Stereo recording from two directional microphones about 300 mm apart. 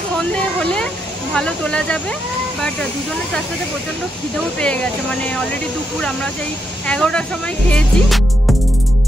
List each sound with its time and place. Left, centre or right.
0.2 s speech: centre
6.9 s speech: centre